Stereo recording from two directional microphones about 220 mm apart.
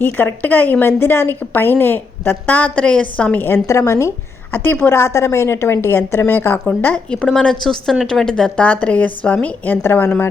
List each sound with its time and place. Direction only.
0.0 s a woman's voice: 10° left (ahead or behind)